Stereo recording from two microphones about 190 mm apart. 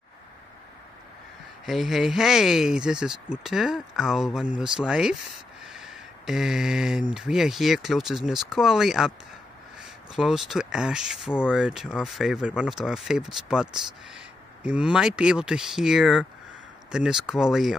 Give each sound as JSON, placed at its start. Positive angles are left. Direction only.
{"t": 1.7, "sound": "speech", "side_deg": 0}